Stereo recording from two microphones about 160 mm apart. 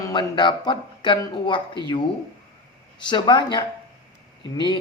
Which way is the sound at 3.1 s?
30° left (ahead or behind).